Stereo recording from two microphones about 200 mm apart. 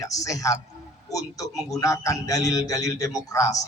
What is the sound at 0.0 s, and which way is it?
A man's voice, 15° left (ahead or behind).